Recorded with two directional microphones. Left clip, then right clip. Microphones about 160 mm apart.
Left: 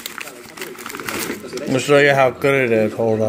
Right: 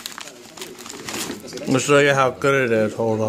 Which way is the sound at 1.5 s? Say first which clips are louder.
Left 2 dB; 30° right (ahead or behind).